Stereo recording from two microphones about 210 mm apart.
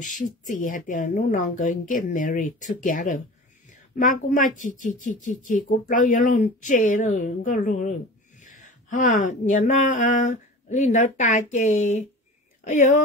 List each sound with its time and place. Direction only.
0.0 s speech: 40° left (ahead or behind)